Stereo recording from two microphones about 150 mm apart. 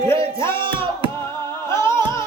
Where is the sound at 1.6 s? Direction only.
15° left (ahead or behind).